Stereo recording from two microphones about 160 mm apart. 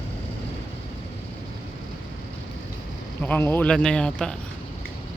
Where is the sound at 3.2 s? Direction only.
10° left (ahead or behind).